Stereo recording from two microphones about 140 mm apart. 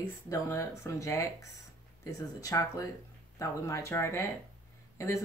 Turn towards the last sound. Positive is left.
turn(degrees=20)  # may be behind; listen again after turning